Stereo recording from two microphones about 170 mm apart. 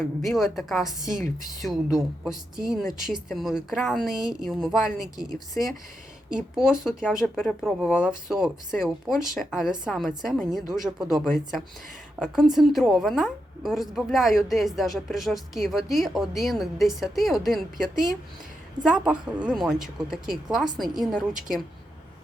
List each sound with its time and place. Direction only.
0.0 s a woman's voice: centre (ahead or behind)
1.1 s speech: 50° right (ahead or behind)
1.6 s a woman's voice: centre (ahead or behind)